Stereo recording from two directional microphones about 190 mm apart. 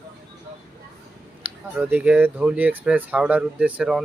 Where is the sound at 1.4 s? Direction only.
10° right (ahead or behind).